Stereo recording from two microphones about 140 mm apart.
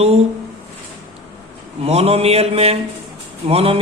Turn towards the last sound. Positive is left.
turn(degrees=-45)  # may be behind; listen again after turning